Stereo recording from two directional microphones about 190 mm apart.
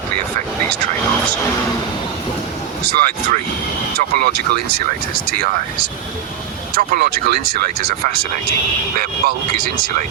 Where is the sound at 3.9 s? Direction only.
50° right (ahead or behind).